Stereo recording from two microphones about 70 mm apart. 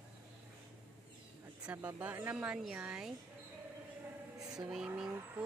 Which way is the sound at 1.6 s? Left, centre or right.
Right.